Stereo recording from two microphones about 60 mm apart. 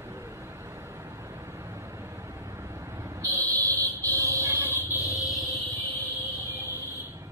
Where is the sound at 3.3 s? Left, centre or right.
Right.